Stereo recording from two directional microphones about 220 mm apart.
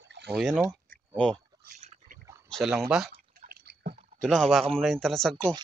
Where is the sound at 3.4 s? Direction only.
45° right (ahead or behind).